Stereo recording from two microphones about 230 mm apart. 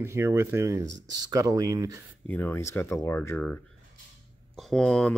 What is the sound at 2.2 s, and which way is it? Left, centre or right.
Speech, centre.